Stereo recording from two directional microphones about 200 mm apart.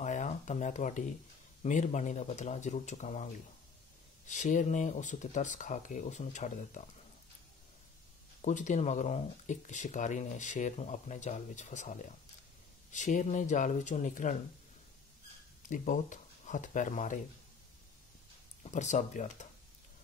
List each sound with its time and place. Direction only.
0.0 s a sound: 35° left (ahead or behind)
1.6 s speech: 35° left (ahead or behind)
4.3 s speech: 40° left (ahead or behind)
8.4 s speech: 40° left (ahead or behind)
15.7 s speech: 40° left (ahead or behind)
18.6 s speech: 35° left (ahead or behind)